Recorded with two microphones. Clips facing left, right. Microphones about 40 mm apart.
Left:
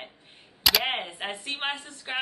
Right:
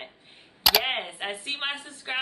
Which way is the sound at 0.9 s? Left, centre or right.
Centre.